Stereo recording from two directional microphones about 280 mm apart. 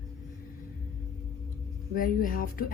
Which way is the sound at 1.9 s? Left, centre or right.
Left.